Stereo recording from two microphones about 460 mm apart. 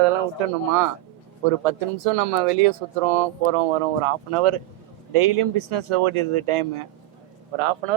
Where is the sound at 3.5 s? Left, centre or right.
Right.